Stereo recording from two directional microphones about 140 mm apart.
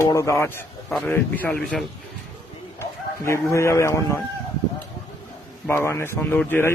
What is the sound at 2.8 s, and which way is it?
Speech, 20° left (ahead or behind).